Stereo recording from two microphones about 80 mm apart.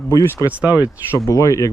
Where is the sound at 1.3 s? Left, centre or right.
Left.